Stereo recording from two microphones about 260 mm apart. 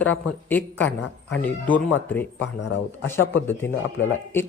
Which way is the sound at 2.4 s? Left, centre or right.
Left.